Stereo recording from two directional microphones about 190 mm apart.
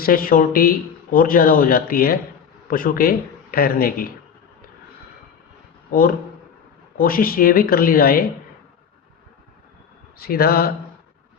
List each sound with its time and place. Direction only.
0.0 s speech: 50° left (ahead or behind)
5.9 s speech: 50° left (ahead or behind)
10.2 s speech: 55° left (ahead or behind)